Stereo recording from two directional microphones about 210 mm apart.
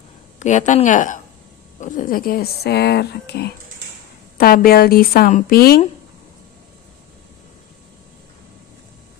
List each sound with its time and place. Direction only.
0.3 s speech: 35° left (ahead or behind)